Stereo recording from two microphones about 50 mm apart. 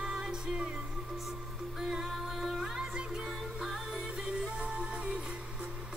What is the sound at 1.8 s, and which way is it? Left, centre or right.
Music, centre.